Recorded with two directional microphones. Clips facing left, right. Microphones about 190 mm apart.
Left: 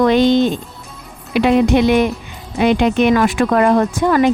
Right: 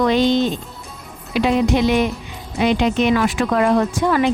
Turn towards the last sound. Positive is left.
turn(degrees=50)  # may be behind; listen again after turning